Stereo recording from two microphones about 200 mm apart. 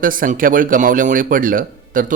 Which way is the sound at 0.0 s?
45° right (ahead or behind).